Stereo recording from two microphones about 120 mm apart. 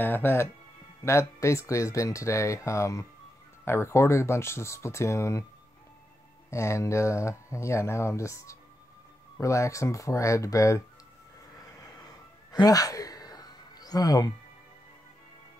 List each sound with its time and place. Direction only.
0.0 s speech: 20° left (ahead or behind)
6.5 s speech: 25° left (ahead or behind)
12.5 s a sound: 30° left (ahead or behind)